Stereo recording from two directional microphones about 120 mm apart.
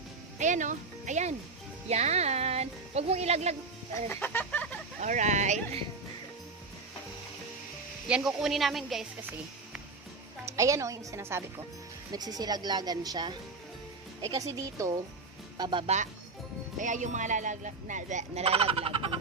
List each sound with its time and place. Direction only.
0.3 s speech: 90° right
1.9 s speech: 65° right (ahead or behind)
4.1 s chicken: 15° left (ahead or behind)
4.9 s speech: 85° right
8.0 s speech: 5° right (ahead or behind)
10.4 s a woman's voice: 25° right (ahead or behind)
12.1 s a woman's voice: 35° right (ahead or behind)
16.8 s speech: 90° right; by 19.1 s 50° right (ahead or behind)